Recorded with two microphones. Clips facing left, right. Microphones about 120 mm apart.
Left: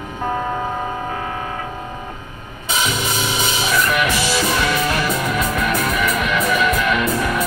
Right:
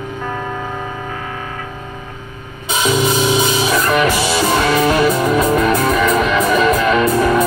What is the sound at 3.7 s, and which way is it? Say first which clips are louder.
Music: right 2 dB; 35° right (ahead or behind).